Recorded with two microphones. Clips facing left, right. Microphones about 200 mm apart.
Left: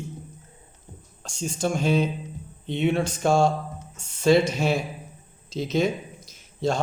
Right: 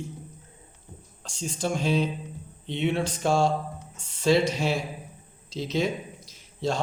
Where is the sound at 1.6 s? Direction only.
50° left (ahead or behind).